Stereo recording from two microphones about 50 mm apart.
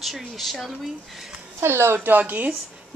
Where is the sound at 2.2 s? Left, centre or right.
Right.